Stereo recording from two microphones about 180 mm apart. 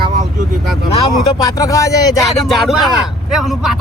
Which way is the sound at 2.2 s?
Centre (ahead or behind).